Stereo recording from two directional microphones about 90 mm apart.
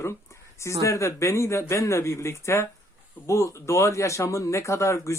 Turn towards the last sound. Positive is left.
turn(degrees=35)  # may be behind; listen again after turning